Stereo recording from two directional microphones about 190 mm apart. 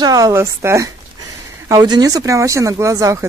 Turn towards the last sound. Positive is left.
turn(degrees=-15)  # may be behind; listen again after turning